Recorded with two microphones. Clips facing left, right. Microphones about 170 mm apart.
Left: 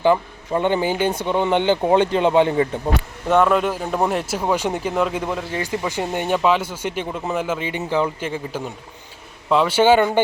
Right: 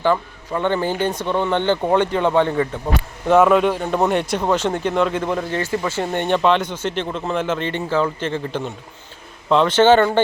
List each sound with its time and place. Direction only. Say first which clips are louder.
0.0 s speech: left 2 dB; 15° left (ahead or behind)
3.2 s speech: right 3 dB; centre (ahead or behind)